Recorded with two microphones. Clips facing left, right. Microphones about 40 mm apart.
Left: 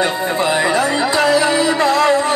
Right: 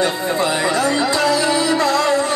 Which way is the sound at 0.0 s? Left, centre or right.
Centre.